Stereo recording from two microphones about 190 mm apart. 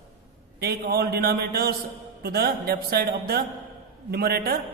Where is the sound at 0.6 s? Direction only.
55° right (ahead or behind).